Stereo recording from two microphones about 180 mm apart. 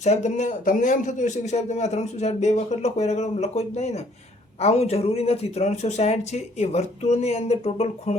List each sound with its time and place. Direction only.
0.0 s a man's voice: 40° left (ahead or behind)